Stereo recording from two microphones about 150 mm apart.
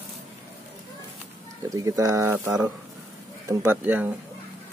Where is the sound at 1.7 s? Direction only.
20° right (ahead or behind).